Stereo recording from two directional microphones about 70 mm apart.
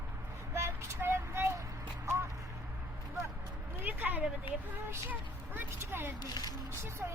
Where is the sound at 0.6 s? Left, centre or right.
Right.